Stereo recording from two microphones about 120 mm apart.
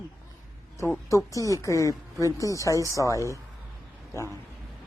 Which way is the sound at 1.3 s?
25° left (ahead or behind).